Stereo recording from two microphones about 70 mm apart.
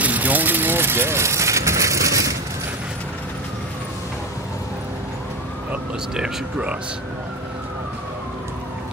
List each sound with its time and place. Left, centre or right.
0.0 s vehicle: right
5.7 s speech: centre